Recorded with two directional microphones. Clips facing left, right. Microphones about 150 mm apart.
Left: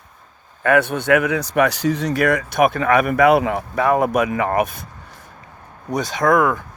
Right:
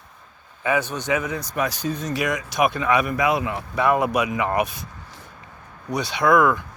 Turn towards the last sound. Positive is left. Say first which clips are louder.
# left 1 dB
turn(degrees=35)  # may be behind; listen again after turning